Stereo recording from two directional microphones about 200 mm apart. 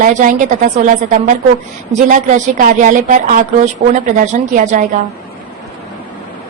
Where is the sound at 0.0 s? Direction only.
40° right (ahead or behind).